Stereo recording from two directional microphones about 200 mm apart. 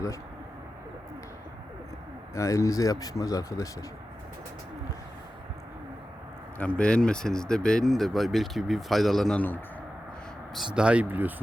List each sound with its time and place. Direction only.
2.3 s speech: 15° left (ahead or behind)
6.6 s speech: 5° left (ahead or behind)
10.8 s speech: 5° right (ahead or behind)